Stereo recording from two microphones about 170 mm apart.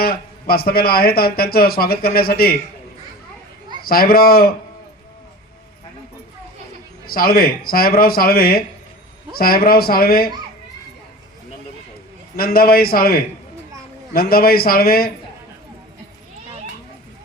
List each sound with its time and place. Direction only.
0.0 s a man's voice: 65° left (ahead or behind)
3.8 s a man's voice: 60° left (ahead or behind)
7.0 s a man's voice: 60° left (ahead or behind)
12.4 s a man's voice: 60° left (ahead or behind)